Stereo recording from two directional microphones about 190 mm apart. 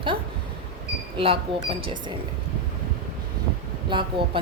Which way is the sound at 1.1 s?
30° right (ahead or behind).